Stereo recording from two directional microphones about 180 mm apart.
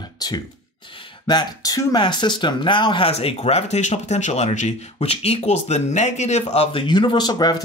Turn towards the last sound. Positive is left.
turn(degrees=25)  # may be behind; listen again after turning